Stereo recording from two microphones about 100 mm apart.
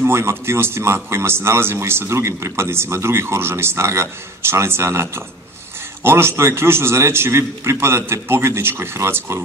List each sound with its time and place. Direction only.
0.0 s speech: 25° right (ahead or behind)